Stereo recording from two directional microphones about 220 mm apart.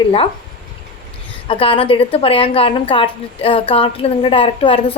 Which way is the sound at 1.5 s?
25° left (ahead or behind).